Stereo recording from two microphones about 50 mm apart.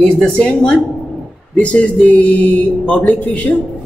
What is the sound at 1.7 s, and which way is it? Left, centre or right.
Speech, centre.